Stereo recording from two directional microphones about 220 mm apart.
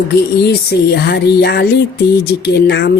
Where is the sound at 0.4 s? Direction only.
50° left (ahead or behind).